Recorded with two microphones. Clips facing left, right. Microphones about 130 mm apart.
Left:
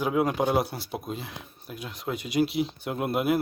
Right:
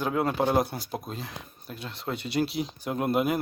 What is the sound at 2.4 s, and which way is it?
Speech, 40° right (ahead or behind).